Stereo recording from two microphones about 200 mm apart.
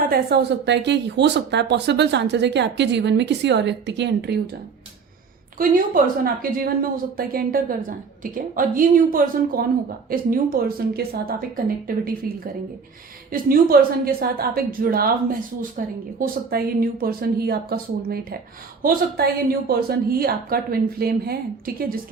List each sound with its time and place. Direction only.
0.0 s speech: 50° right (ahead or behind)
5.5 s a woman's voice: 45° right (ahead or behind)
13.3 s a woman's voice: 45° right (ahead or behind)